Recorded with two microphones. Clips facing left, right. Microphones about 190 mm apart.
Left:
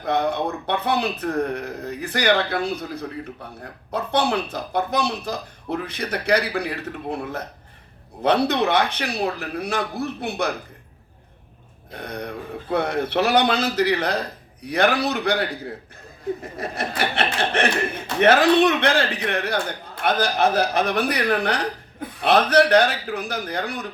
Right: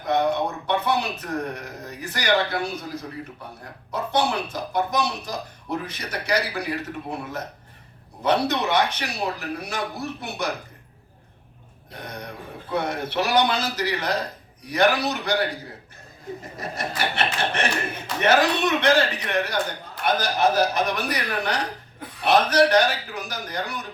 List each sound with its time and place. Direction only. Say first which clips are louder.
0.0 s speech: even; 60° left (ahead or behind)
3.6 s speech: left 2 dB; 60° left (ahead or behind)
12.0 s speech: left 5 dB; 60° left (ahead or behind)
16.6 s speech: right 1 dB; 60° left (ahead or behind)